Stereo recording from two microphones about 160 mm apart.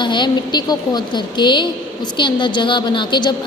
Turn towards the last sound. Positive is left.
turn(degrees=30)  # may be behind; listen again after turning